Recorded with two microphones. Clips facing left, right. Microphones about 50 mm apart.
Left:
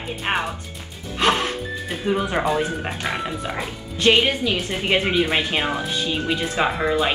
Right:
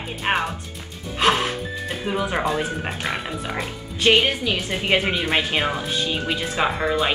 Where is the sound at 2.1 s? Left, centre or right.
Centre.